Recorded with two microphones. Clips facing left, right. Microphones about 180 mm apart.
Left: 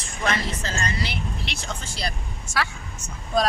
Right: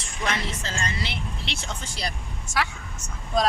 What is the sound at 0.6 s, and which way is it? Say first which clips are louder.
Speech: left 2 dB; 25° right (ahead or behind).